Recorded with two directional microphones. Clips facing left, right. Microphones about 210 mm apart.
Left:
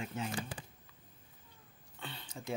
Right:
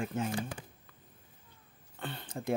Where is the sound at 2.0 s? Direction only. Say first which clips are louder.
Right 7 dB; 55° right (ahead or behind).